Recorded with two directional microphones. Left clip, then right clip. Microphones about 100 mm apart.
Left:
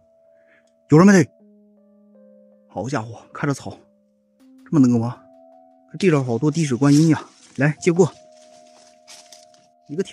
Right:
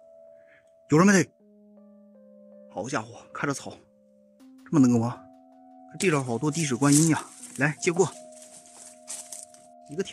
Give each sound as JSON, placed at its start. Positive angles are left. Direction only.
{"t": 0.8, "sound": "speech", "side_deg": 50}
{"t": 2.7, "sound": "speech", "side_deg": 35}
{"t": 4.6, "sound": "speech", "side_deg": 15}
{"t": 5.9, "sound": "speech", "side_deg": 35}
{"t": 7.5, "sound": "speech", "side_deg": 45}
{"t": 9.0, "sound": "a sound", "side_deg": 55}